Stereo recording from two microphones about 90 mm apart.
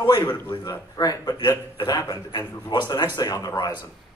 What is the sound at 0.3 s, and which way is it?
A man's voice, 55° left (ahead or behind).